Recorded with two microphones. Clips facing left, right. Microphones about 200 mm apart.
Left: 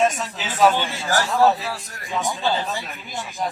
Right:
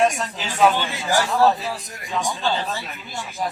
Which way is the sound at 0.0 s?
Centre (ahead or behind).